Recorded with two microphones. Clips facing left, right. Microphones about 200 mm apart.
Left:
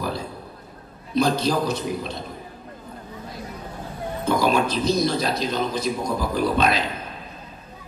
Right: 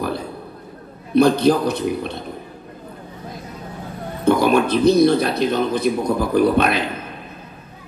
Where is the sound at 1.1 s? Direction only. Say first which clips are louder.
Right 7 dB; 60° right (ahead or behind).